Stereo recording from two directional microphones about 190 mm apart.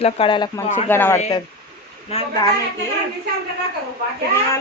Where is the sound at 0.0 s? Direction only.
25° left (ahead or behind).